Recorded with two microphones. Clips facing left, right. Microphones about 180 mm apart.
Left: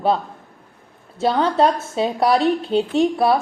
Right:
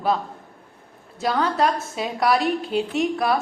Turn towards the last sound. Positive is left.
turn(degrees=30)  # may be behind; listen again after turning